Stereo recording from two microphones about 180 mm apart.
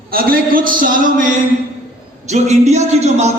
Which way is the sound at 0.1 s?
55° right (ahead or behind).